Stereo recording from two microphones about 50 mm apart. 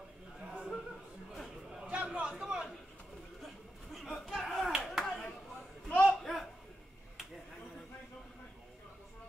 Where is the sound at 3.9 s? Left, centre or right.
Centre.